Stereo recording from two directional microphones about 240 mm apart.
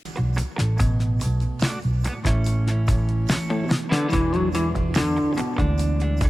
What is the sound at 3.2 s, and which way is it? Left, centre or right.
Music, centre.